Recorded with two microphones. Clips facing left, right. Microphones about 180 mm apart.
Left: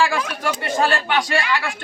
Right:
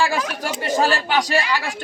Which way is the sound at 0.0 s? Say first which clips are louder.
Left 1 dB; 40° right (ahead or behind).